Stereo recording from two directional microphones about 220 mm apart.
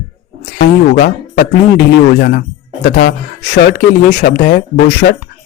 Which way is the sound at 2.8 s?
45° left (ahead or behind).